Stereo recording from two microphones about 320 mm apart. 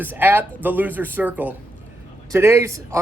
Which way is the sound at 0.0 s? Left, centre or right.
Centre.